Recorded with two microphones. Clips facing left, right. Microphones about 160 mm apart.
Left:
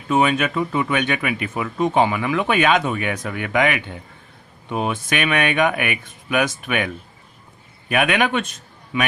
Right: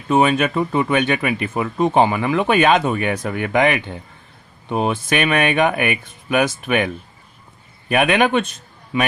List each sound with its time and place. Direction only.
0.1 s speech: 30° right (ahead or behind)